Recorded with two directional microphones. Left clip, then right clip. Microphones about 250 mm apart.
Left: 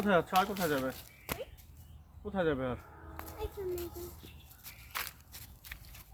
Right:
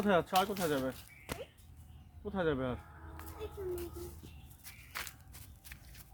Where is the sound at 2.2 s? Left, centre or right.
Centre.